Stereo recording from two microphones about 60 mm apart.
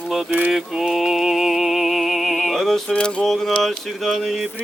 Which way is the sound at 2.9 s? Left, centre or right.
Centre.